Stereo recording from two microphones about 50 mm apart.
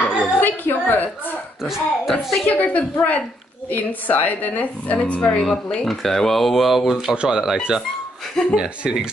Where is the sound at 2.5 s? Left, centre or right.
Left.